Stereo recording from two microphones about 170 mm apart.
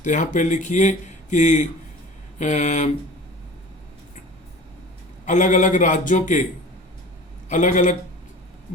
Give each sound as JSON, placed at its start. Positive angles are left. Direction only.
{"t": 0.0, "sound": "speech", "side_deg": 45}
{"t": 5.2, "sound": "speech", "side_deg": 45}
{"t": 7.5, "sound": "speech", "side_deg": 50}